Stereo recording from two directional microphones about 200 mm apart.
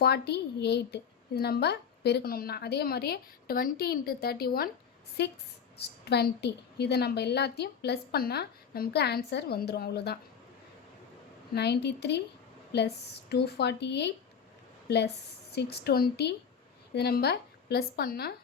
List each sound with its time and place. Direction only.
0.0 s a woman's voice: 55° left (ahead or behind)
11.5 s a woman's voice: 55° left (ahead or behind)